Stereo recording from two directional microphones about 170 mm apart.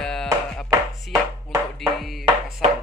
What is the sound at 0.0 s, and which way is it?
Music, 5° left (ahead or behind).